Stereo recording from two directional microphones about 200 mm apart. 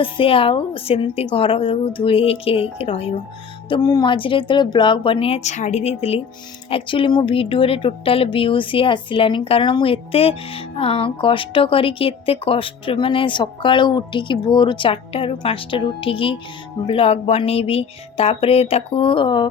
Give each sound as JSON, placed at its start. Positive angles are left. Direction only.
{"t": 0.0, "sound": "speech", "side_deg": 25}